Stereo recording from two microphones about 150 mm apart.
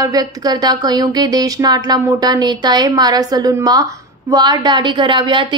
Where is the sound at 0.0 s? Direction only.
25° right (ahead or behind).